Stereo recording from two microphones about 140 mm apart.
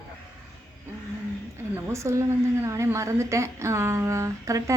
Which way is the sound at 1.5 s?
20° right (ahead or behind).